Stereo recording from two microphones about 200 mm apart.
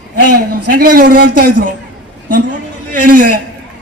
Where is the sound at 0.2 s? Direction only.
45° right (ahead or behind).